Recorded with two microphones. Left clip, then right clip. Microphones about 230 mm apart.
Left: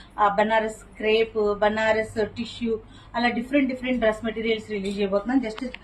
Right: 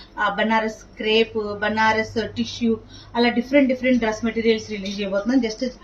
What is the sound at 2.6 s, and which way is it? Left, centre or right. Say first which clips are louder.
Speech: right 4 dB; centre.